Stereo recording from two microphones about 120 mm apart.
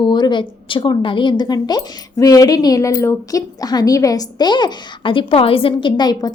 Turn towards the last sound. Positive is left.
turn(degrees=35)  # may be behind; listen again after turning